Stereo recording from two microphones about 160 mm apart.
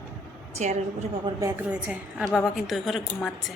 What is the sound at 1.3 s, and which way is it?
A woman's voice, 15° right (ahead or behind).